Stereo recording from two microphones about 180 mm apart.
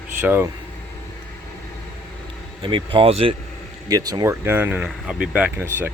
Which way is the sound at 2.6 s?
30° right (ahead or behind).